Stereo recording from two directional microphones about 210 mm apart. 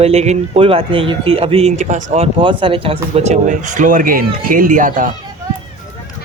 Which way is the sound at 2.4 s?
25° right (ahead or behind).